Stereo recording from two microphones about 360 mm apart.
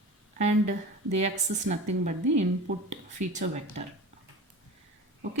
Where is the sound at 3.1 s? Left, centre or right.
Centre.